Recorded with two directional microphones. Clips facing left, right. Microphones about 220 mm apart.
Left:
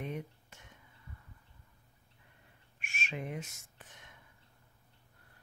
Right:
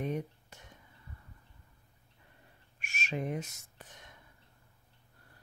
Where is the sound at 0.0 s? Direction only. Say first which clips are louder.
Right 5 dB; 40° right (ahead or behind).